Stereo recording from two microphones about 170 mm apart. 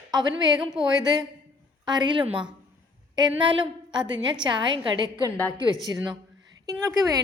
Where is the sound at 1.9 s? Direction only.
25° right (ahead or behind).